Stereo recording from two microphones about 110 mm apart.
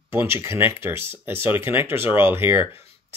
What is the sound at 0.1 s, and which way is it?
Speech, 20° right (ahead or behind).